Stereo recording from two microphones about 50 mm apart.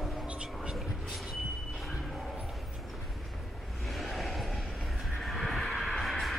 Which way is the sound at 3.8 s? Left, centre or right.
Centre.